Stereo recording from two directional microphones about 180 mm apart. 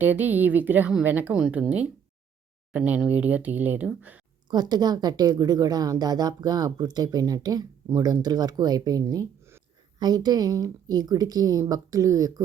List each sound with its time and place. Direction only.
0.0 s speech: 10° right (ahead or behind)
4.4 s a woman's voice: 20° right (ahead or behind)